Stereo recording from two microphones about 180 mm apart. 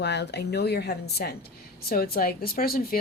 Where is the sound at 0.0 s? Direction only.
70° left (ahead or behind).